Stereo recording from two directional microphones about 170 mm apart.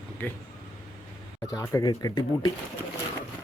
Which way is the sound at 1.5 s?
20° left (ahead or behind).